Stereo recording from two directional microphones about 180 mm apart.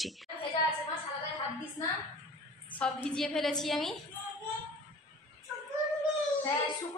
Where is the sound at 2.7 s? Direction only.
5° left (ahead or behind).